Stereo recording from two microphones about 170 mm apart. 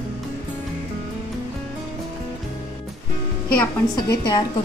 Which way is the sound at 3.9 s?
25° left (ahead or behind).